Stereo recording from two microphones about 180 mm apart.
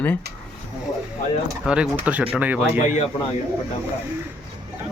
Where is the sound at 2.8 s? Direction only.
40° left (ahead or behind).